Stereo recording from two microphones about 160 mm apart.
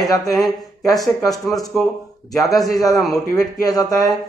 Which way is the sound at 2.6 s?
20° left (ahead or behind).